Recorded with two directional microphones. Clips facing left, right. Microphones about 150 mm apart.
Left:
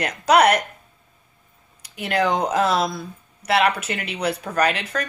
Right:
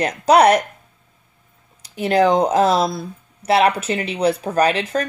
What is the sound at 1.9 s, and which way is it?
A woman's voice, 35° right (ahead or behind).